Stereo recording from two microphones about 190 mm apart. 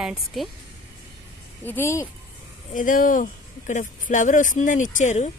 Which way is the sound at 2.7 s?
45° left (ahead or behind).